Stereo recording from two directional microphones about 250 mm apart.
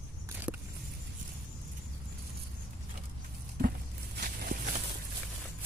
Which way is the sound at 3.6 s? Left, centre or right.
Right.